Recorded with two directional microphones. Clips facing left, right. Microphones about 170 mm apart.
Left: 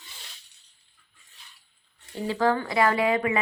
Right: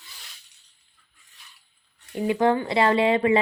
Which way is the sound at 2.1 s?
15° right (ahead or behind).